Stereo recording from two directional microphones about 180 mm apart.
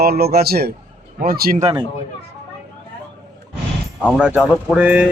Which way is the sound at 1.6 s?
25° right (ahead or behind).